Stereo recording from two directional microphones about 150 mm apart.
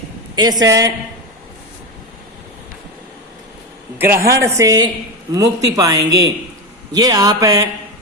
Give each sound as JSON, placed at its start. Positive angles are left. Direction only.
{"t": 0.3, "sound": "a man's voice", "side_deg": -25}
{"t": 3.9, "sound": "a man's voice", "side_deg": -15}